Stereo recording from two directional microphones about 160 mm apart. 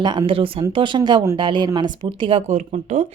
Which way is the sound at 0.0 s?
30° right (ahead or behind).